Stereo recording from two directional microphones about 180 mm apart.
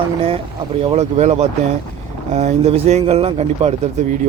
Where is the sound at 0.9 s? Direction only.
40° right (ahead or behind).